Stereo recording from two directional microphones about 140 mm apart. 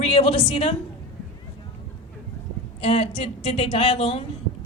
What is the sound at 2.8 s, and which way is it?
Speech, 45° left (ahead or behind).